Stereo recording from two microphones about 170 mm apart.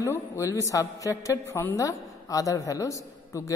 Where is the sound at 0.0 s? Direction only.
15° left (ahead or behind).